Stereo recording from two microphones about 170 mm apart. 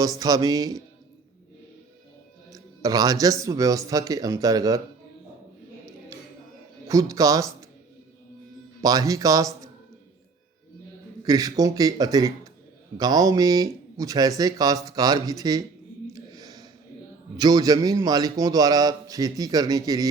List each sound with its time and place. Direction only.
0.0 s a man's voice: 20° right (ahead or behind)
2.5 s a man's voice: 20° right (ahead or behind)
6.8 s a man's voice: 20° right (ahead or behind)
8.8 s a man's voice: 20° right (ahead or behind)
11.2 s a man's voice: 20° right (ahead or behind)
16.1 s a sound: 20° right (ahead or behind)
17.3 s a man's voice: 20° right (ahead or behind)